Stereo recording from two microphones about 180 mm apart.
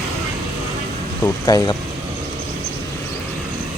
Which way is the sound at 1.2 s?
20° left (ahead or behind).